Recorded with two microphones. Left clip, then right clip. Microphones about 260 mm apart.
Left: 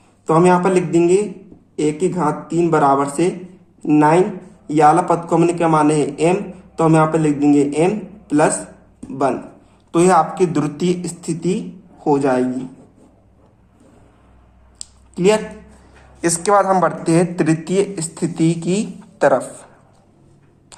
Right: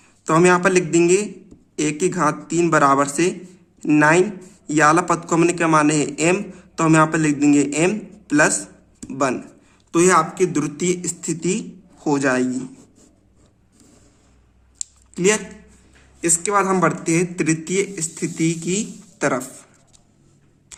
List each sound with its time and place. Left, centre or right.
0.3 s a man's voice: right
15.1 s speech: right
16.2 s speech: centre